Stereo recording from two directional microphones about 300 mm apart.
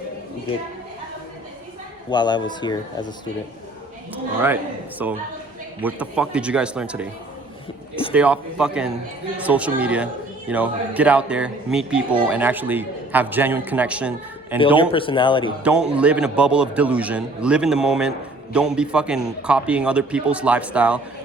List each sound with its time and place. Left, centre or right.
2.0 s speech: centre
4.1 s a man's voice: centre
8.1 s a man's voice: centre
14.8 s speech: centre
15.6 s a man's voice: centre